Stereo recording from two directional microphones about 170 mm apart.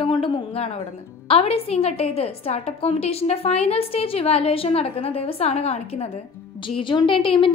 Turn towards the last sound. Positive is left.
turn(degrees=30)  # may be behind; listen again after turning